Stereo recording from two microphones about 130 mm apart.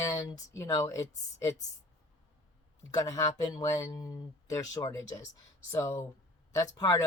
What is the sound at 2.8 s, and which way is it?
Speech, 25° left (ahead or behind).